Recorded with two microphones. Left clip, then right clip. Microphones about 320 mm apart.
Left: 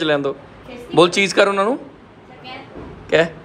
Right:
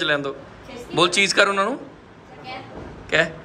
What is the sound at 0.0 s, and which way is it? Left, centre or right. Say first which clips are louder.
Speech: left 4 dB; centre.